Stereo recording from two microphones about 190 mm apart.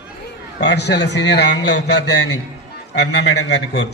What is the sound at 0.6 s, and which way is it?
A man's voice, 60° left (ahead or behind).